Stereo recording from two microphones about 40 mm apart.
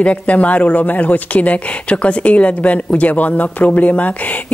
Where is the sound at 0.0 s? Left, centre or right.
Left.